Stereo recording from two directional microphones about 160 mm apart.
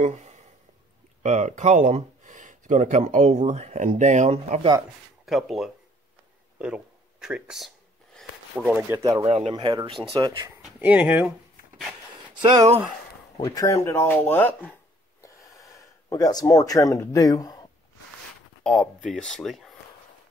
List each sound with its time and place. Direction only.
0.0 s a sound: 45° right (ahead or behind)
1.2 s speech: 45° right (ahead or behind)
5.2 s speech: centre (ahead or behind)
8.2 s a sound: centre (ahead or behind)
8.7 s speech: 10° right (ahead or behind)
9.2 s speech: 40° right (ahead or behind)
9.5 s speech: 30° right (ahead or behind)
10.6 s speech: 10° right (ahead or behind)
13.4 s speech: 20° left (ahead or behind)
15.2 s gasp: 20° left (ahead or behind)
18.6 s speech: 5° left (ahead or behind)